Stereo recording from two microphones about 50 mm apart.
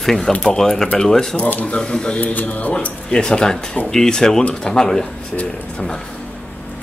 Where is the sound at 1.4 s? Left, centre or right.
Left.